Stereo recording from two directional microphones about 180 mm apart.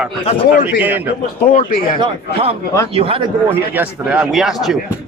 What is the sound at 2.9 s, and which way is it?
Speech, 30° right (ahead or behind).